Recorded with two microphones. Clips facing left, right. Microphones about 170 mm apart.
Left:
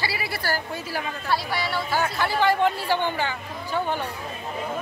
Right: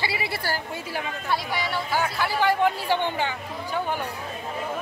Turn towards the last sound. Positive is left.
turn(degrees=-20)  # may be behind; listen again after turning